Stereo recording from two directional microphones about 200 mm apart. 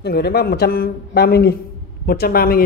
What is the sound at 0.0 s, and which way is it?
A man's voice, 55° left (ahead or behind).